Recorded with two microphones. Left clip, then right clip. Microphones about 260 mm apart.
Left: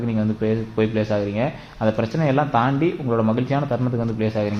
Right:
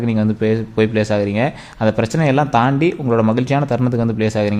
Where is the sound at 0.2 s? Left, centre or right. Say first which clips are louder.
Right 4 dB; right.